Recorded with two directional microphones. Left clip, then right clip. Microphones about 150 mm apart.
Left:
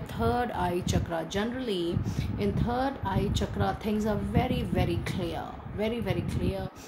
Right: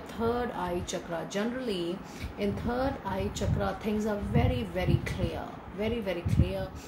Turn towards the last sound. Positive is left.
turn(degrees=50)  # may be behind; listen again after turning